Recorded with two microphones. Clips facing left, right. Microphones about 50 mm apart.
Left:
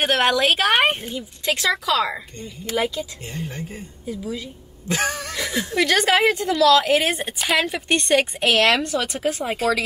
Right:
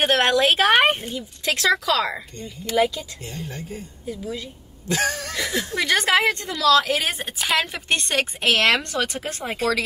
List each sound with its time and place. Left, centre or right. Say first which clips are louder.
0.0 s a woman's voice: even; centre
3.3 s a woman's voice: left 2 dB; left
4.8 s a woman's voice: even; left
5.2 s a woman's voice: even; centre